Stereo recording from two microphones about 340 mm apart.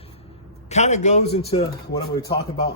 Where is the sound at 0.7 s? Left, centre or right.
Centre.